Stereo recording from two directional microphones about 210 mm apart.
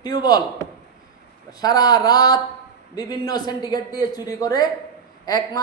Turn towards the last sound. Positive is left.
turn(degrees=15)  # may be behind; listen again after turning